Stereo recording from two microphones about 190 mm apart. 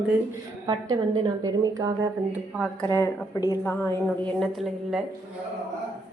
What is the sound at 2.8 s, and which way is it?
A woman's voice, 10° left (ahead or behind).